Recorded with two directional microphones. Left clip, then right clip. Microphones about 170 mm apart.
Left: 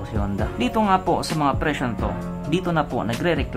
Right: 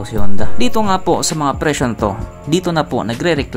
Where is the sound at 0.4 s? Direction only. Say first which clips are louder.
Right 5 dB; 35° right (ahead or behind).